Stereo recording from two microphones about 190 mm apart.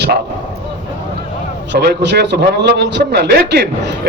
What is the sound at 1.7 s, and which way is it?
A man's voice, 65° right (ahead or behind).